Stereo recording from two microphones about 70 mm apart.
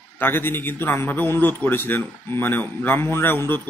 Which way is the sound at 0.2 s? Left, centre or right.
Left.